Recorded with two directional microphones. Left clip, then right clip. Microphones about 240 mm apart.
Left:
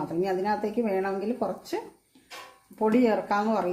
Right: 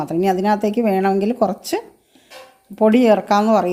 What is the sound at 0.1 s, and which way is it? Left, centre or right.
Speech, right.